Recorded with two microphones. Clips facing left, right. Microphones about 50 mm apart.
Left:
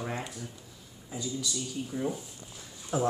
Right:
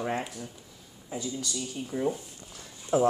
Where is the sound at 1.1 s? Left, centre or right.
Right.